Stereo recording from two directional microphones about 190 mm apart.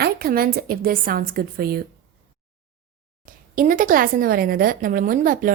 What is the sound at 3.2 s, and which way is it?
A woman's voice, 45° right (ahead or behind).